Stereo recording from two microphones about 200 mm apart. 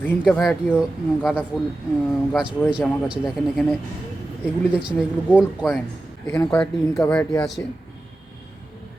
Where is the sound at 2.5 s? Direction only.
Centre (ahead or behind).